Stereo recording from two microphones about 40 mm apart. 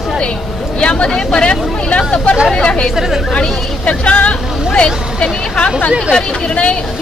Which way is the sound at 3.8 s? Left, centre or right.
Left.